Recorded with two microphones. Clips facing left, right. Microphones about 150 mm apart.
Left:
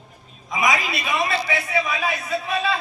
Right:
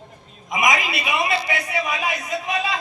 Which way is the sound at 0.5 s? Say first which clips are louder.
Right 1 dB; 15° right (ahead or behind).